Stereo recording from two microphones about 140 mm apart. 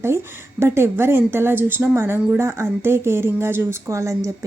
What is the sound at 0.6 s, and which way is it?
Speech, 15° right (ahead or behind).